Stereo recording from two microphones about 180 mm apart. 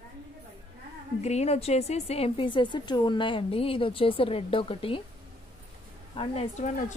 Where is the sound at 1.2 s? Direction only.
40° left (ahead or behind).